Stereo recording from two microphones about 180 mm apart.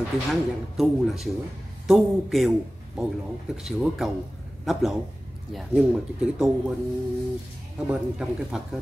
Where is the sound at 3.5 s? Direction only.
5° right (ahead or behind).